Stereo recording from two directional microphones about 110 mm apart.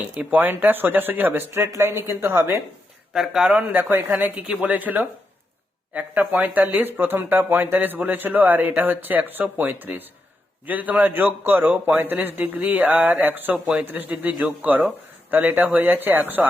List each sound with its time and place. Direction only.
0.2 s speech: 15° right (ahead or behind)
3.1 s a man's voice: 5° right (ahead or behind)